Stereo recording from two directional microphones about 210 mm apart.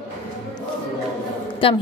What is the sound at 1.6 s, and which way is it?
Speech, 25° left (ahead or behind).